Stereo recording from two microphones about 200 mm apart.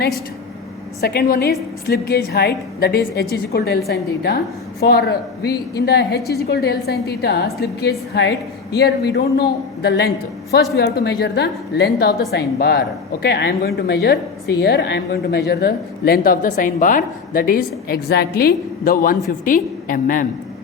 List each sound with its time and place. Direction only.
1.0 s a woman's voice: 50° left (ahead or behind)